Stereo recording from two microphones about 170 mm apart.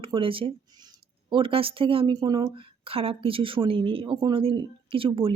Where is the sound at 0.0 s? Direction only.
30° right (ahead or behind).